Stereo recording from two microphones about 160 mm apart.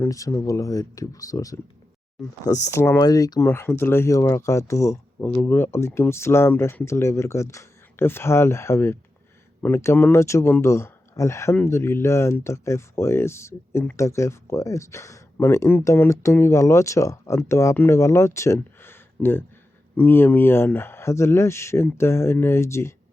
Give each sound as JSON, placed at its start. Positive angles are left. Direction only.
{"t": 0.0, "sound": "speech", "side_deg": 20}